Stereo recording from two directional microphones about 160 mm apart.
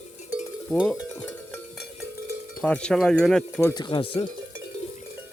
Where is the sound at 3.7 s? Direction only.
30° left (ahead or behind).